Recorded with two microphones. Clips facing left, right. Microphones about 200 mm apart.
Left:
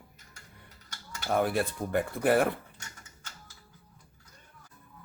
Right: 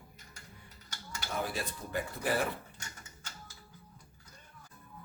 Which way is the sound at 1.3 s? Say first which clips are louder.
Left 10 dB; 60° left (ahead or behind).